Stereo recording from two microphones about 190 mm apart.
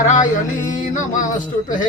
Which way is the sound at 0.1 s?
40° left (ahead or behind).